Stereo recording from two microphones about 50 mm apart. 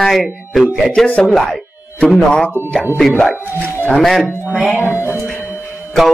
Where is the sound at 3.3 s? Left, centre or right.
Right.